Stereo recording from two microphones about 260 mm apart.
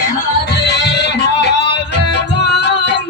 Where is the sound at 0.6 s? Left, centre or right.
Left.